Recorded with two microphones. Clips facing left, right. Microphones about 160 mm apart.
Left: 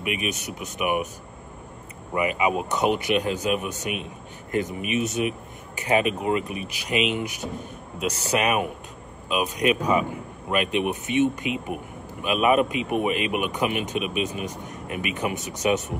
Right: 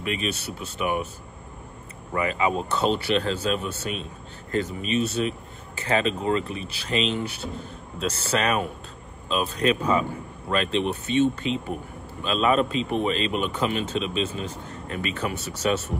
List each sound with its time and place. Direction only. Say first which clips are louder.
0.0 s a man's voice: even; 15° left (ahead or behind)
2.1 s a man's voice: left 1 dB; 15° left (ahead or behind)